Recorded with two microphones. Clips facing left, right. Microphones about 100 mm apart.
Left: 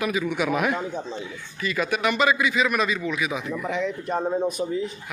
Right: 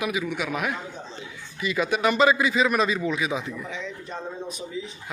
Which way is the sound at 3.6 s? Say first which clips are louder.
Left 8 dB; 60° left (ahead or behind).